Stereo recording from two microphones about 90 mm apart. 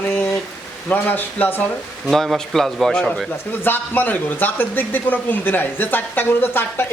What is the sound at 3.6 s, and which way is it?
Speech, 20° left (ahead or behind).